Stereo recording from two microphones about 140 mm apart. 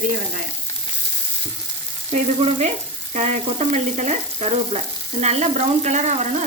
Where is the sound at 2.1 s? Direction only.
60° right (ahead or behind).